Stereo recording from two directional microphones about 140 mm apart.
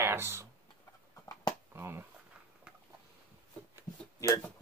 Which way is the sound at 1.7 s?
15° right (ahead or behind).